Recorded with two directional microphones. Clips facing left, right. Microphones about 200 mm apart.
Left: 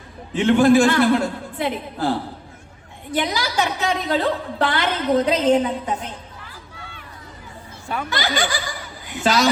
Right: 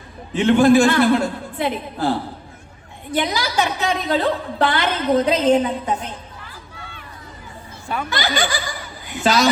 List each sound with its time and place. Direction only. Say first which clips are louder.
0.3 s a woman's voice: right 1 dB; 25° right (ahead or behind)
6.0 s chatter: right 1 dB; 10° left (ahead or behind)
8.1 s a woman's voice: right 1 dB; 25° right (ahead or behind)